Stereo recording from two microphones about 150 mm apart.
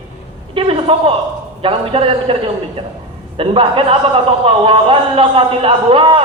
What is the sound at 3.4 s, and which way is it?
Speech, 35° right (ahead or behind).